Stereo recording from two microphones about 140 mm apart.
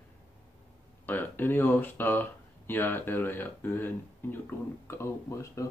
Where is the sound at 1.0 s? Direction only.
15° left (ahead or behind).